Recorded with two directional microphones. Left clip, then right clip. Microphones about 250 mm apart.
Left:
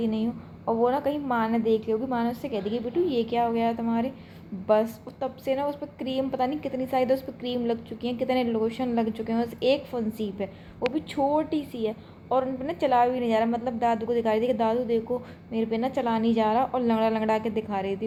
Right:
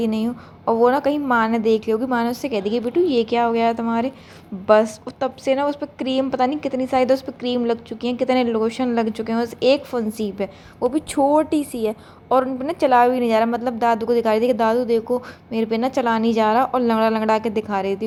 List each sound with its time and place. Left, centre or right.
0.0 s a woman's voice: right